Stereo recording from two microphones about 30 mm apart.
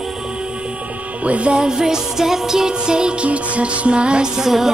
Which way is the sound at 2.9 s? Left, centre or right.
Right.